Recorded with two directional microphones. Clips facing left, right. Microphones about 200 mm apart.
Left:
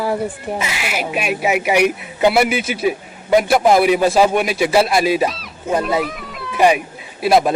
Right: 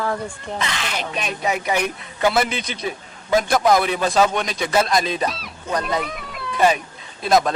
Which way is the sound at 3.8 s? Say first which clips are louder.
Left 5 dB; 10° left (ahead or behind).